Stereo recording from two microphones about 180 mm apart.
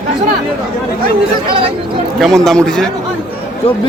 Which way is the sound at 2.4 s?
5° left (ahead or behind).